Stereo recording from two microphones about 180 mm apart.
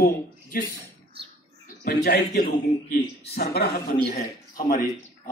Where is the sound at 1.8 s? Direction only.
60° left (ahead or behind).